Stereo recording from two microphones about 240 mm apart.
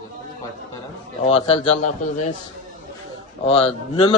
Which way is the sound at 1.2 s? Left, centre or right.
Left.